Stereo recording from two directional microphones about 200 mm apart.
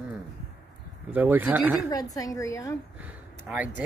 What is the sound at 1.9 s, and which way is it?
Speech, 15° left (ahead or behind).